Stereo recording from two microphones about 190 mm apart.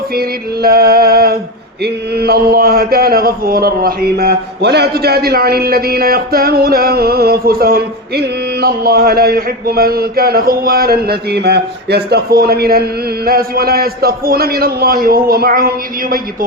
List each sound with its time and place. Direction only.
0.1 s music: 55° right (ahead or behind)
1.8 s mantra: 55° right (ahead or behind)